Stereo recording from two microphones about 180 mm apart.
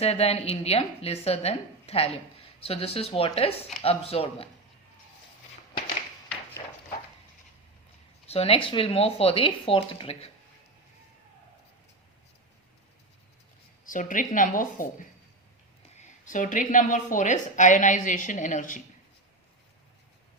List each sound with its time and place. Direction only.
0.0 s a woman's voice: 35° left (ahead or behind)
8.3 s a woman's voice: 30° left (ahead or behind)
13.8 s a woman's voice: 45° left (ahead or behind)